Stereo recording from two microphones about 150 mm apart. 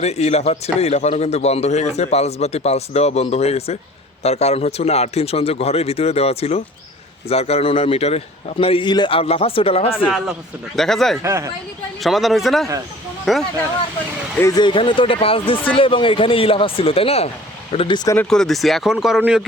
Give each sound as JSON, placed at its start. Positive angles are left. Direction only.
{"t": 0.0, "sound": "a man's voice", "side_deg": 45}
{"t": 10.8, "sound": "speech", "side_deg": 0}
{"t": 11.2, "sound": "speech", "side_deg": -20}
{"t": 12.0, "sound": "speech", "side_deg": 0}
{"t": 14.5, "sound": "a man's voice", "side_deg": 30}
{"t": 18.3, "sound": "speech", "side_deg": 5}